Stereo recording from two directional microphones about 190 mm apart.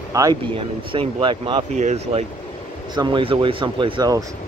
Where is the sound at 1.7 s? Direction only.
35° right (ahead or behind).